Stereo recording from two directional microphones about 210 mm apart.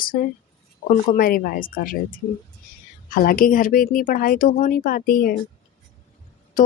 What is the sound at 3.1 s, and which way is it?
Speech, 45° left (ahead or behind).